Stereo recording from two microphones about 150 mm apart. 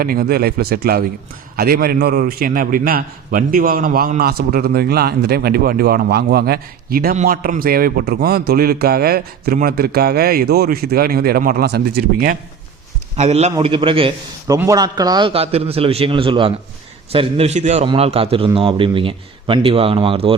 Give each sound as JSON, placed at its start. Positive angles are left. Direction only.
{"t": 0.0, "sound": "a man's voice", "side_deg": -75}
{"t": 4.2, "sound": "a man's voice", "side_deg": -90}
{"t": 7.3, "sound": "a man's voice", "side_deg": -75}
{"t": 13.1, "sound": "a man's voice", "side_deg": -45}
{"t": 14.4, "sound": "a man's voice", "side_deg": -20}
{"t": 15.3, "sound": "a man's voice", "side_deg": -40}